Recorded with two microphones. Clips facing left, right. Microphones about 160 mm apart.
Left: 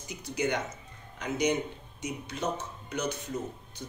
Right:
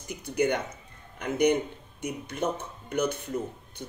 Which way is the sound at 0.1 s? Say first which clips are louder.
Right 4 dB; 55° right (ahead or behind).